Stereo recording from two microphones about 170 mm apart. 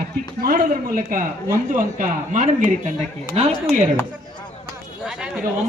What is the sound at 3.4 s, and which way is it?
Speech, 35° right (ahead or behind).